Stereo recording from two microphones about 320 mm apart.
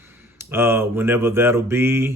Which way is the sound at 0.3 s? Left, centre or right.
Centre.